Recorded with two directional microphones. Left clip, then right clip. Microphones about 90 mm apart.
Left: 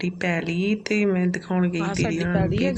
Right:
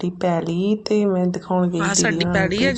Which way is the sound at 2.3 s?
25° right (ahead or behind).